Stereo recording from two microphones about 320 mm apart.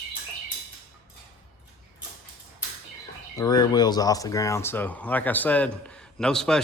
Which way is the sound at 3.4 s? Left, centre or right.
Centre.